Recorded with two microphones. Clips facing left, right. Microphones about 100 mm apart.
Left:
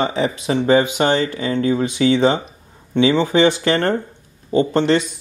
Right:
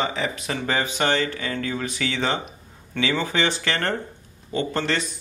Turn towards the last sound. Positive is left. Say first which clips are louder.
# left 9 dB
turn(degrees=30)  # may be behind; listen again after turning